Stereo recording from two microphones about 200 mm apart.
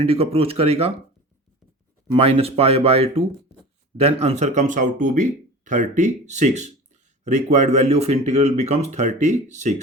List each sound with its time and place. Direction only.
0.0 s speech: 30° right (ahead or behind)
2.1 s speech: 30° right (ahead or behind)